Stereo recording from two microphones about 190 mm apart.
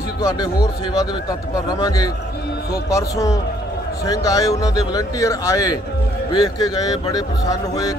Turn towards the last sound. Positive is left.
turn(degrees=20)  # may be behind; listen again after turning